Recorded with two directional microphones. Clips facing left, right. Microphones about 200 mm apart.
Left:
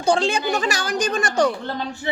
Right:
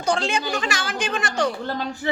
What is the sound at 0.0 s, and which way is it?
Speech, 30° left (ahead or behind).